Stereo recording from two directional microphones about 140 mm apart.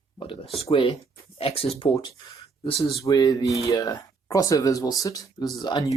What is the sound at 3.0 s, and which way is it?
Speech, 25° left (ahead or behind).